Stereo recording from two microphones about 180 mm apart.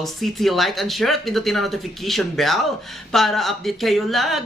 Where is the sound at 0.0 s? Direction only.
Centre (ahead or behind).